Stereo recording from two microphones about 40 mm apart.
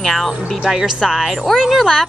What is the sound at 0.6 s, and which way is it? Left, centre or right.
Speech, centre.